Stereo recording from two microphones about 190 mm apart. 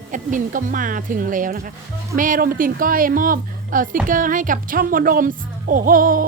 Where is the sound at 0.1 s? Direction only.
45° right (ahead or behind).